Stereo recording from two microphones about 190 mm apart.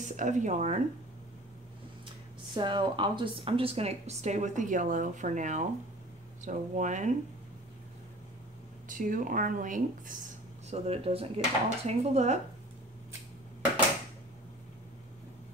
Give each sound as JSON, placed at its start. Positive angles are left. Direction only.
{"t": 0.0, "sound": "speech", "side_deg": -40}
{"t": 2.5, "sound": "speech", "side_deg": -25}
{"t": 8.8, "sound": "speech", "side_deg": -45}
{"t": 10.7, "sound": "speech", "side_deg": -30}